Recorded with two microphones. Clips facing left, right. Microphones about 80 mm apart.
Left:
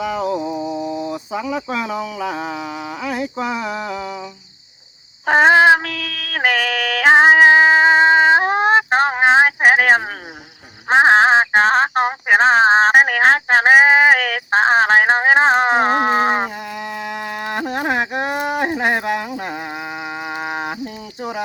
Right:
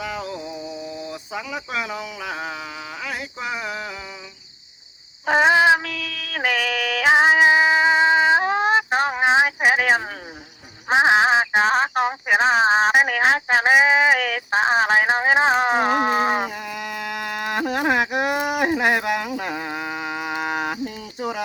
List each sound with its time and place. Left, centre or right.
0.5 s mantra: left
5.2 s female singing: left
10.9 s a sound: left